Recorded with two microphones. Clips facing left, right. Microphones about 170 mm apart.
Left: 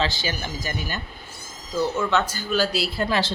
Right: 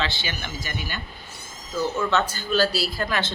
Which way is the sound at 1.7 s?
10° left (ahead or behind).